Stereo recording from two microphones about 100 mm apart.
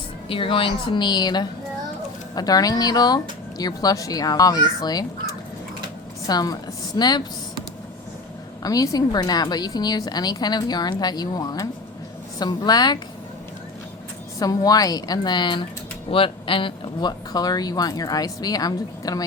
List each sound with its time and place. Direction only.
0.3 s a woman's voice: 60° left (ahead or behind); by 5.0 s 40° left (ahead or behind)
6.2 s a woman's voice: 40° left (ahead or behind)
8.6 s a woman's voice: 35° left (ahead or behind)
14.3 s a woman's voice: 40° left (ahead or behind)
16.1 s a woman's voice: 60° left (ahead or behind); by 19.2 s 40° left (ahead or behind)